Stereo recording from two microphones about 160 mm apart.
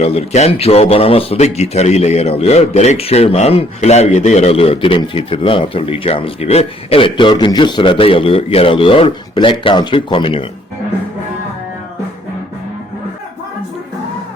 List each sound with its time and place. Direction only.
0.0 s a man's voice: 40° left (ahead or behind)